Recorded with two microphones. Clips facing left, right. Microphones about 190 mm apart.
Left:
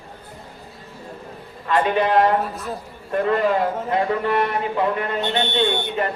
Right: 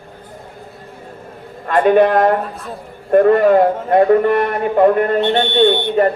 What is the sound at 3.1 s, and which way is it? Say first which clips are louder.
A man's voice: right 9 dB; 50° right (ahead or behind).